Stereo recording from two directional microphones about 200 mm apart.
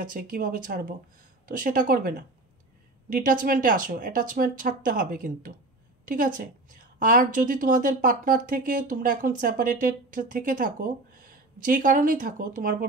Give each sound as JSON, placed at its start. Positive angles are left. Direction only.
{"t": 0.0, "sound": "a woman's voice", "side_deg": -45}